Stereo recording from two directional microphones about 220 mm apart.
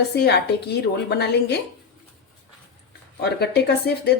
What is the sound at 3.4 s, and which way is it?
Speech, 45° left (ahead or behind).